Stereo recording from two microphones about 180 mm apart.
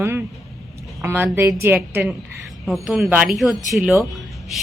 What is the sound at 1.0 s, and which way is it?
A woman's voice, 15° right (ahead or behind).